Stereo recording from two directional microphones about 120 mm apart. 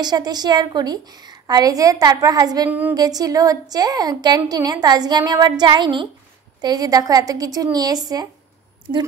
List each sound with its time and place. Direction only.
0.0 s a woman's voice: 35° right (ahead or behind)